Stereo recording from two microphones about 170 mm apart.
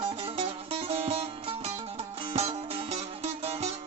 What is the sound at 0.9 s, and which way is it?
Music, 35° right (ahead or behind).